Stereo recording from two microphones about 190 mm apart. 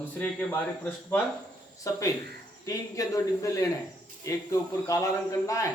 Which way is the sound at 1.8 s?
15° left (ahead or behind).